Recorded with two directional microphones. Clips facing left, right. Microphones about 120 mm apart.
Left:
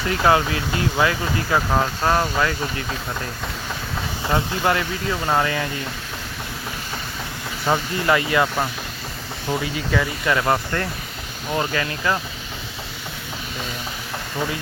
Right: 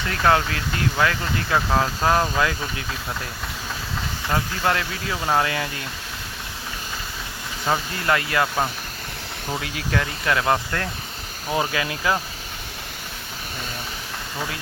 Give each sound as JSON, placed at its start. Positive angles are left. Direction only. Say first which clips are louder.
{"t": 0.1, "sound": "speech", "louder": "left 2 dB", "side_deg": 10}
{"t": 4.6, "sound": "speech", "louder": "left 2 dB", "side_deg": 5}
{"t": 7.7, "sound": "speech", "louder": "left 3 dB", "side_deg": 5}